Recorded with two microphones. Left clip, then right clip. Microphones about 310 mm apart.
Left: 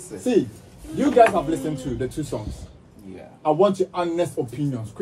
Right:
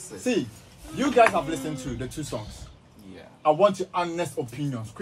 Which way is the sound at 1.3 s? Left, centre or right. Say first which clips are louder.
Left 4 dB; right.